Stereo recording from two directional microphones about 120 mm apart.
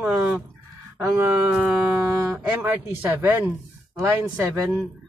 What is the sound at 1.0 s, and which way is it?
A woman's voice, 20° right (ahead or behind).